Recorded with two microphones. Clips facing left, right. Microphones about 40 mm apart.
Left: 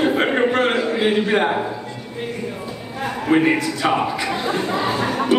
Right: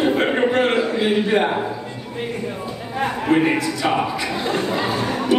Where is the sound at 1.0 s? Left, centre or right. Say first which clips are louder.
Left 2 dB; centre.